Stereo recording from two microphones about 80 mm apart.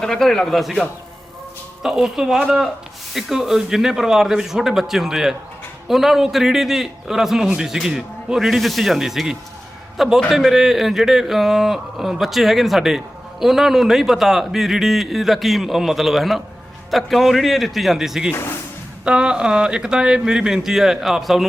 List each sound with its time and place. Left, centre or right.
0.0 s a man's voice: centre
18.3 s speech: left
19.0 s speech: centre